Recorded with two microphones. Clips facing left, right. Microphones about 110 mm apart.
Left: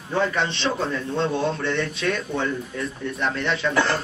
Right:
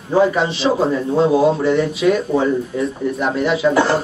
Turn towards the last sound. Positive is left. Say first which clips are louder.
# right 7 dB
turn(degrees=-25)  # may be behind; listen again after turning